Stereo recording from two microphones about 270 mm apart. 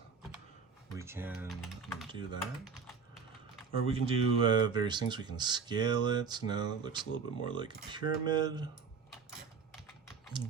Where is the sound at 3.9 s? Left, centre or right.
Centre.